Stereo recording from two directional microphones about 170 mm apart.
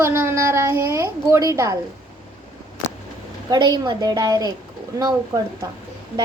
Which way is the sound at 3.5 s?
25° right (ahead or behind).